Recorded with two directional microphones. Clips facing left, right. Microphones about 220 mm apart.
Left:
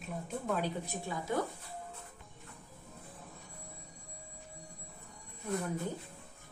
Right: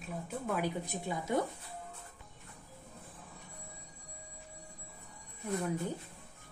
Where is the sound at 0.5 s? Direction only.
15° right (ahead or behind).